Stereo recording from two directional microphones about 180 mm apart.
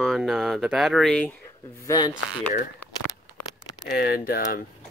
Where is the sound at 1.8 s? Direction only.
25° left (ahead or behind).